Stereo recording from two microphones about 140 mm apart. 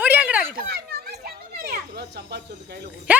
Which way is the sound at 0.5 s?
90° right.